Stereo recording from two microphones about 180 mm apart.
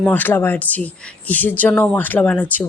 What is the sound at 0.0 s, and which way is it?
Speech, 10° left (ahead or behind).